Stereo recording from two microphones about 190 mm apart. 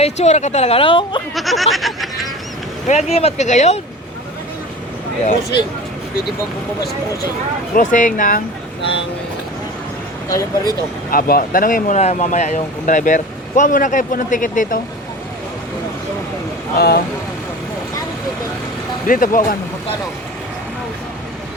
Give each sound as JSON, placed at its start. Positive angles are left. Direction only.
{"t": 0.0, "sound": "a woman's voice", "side_deg": 35}
{"t": 1.4, "sound": "speech", "side_deg": 0}
{"t": 2.8, "sound": "a woman's voice", "side_deg": 40}
{"t": 7.8, "sound": "speech", "side_deg": 40}
{"t": 8.8, "sound": "speech", "side_deg": 30}
{"t": 10.2, "sound": "speech", "side_deg": 15}
{"t": 11.1, "sound": "speech", "side_deg": 50}
{"t": 16.7, "sound": "speech", "side_deg": 55}
{"t": 19.0, "sound": "speech", "side_deg": 45}